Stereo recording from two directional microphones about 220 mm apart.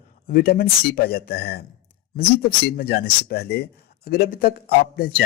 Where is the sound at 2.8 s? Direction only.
45° left (ahead or behind).